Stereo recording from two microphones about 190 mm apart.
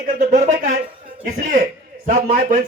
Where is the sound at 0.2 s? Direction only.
40° right (ahead or behind).